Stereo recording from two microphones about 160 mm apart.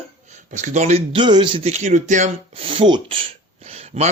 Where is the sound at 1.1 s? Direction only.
30° right (ahead or behind).